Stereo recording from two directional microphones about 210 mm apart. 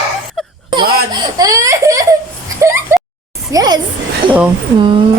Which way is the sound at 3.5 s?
20° right (ahead or behind).